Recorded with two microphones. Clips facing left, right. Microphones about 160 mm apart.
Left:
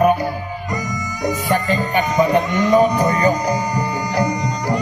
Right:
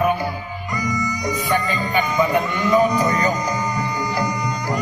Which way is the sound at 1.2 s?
45° left (ahead or behind).